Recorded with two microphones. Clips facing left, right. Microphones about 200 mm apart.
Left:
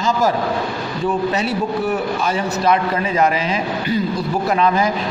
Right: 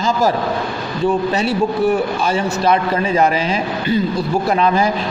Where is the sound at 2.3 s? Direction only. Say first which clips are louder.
Right 2 dB; 30° right (ahead or behind).